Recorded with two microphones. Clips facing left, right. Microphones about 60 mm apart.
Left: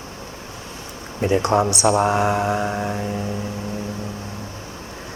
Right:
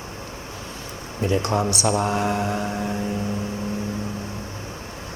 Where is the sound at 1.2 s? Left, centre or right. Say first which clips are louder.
Left 4 dB; left.